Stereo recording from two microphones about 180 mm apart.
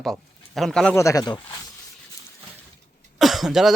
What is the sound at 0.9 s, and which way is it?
Speech, 20° left (ahead or behind).